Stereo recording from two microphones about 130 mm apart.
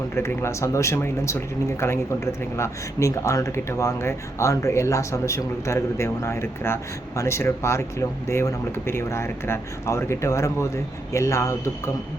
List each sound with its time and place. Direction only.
0.2 s speech: 20° left (ahead or behind)